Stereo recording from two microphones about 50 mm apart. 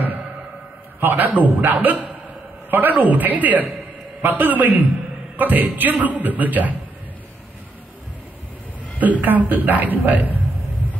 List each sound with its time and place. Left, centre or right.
1.0 s a man's voice: right
9.0 s a man's voice: right